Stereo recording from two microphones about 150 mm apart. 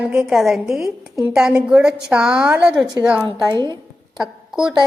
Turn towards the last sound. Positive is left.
turn(degrees=-5)  # may be behind; listen again after turning